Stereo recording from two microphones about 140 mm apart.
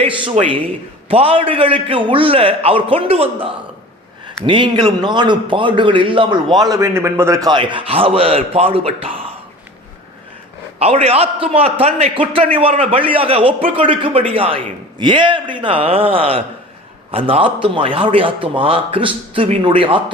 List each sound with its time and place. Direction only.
0.0 s a man's voice: 40° right (ahead or behind)
6.6 s a man's voice: 20° right (ahead or behind); by 9.2 s 40° right (ahead or behind)
10.8 s a man's voice: 45° right (ahead or behind)